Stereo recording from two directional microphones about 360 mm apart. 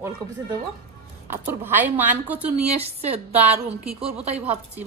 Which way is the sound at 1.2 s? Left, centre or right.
Centre.